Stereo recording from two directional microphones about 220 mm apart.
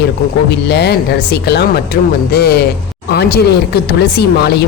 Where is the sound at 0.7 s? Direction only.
45° left (ahead or behind).